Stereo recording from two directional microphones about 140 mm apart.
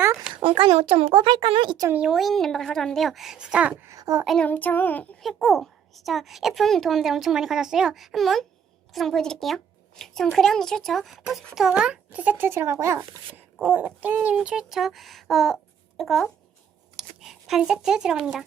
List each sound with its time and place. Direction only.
0.3 s speech: 40° right (ahead or behind)
1.9 s a child's voice: 5° right (ahead or behind); by 4.2 s 25° right (ahead or behind)
4.4 s child singing: 10° left (ahead or behind)
5.2 s a child's voice: centre (ahead or behind)